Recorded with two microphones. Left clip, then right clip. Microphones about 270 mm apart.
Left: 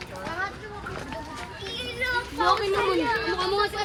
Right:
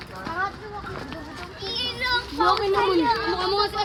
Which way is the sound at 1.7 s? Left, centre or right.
Right.